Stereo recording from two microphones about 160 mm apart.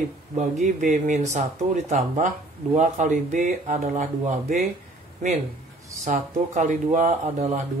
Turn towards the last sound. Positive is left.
turn(degrees=-45)  # may be behind; listen again after turning